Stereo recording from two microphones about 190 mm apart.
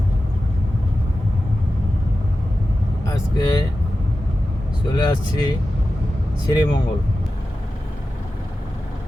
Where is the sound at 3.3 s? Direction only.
20° left (ahead or behind).